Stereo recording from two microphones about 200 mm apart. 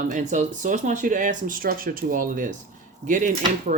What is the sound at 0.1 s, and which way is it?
Speech, 40° right (ahead or behind).